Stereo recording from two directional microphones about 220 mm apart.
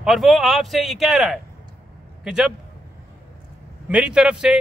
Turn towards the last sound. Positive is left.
turn(degrees=-5)  # may be behind; listen again after turning